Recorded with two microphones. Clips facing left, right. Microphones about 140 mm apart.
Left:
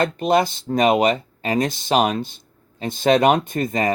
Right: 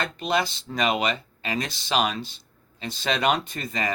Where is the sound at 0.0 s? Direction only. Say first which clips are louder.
Left 8 dB; 45° left (ahead or behind).